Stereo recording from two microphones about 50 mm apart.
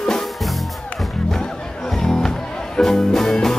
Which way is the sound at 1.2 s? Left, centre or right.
Centre.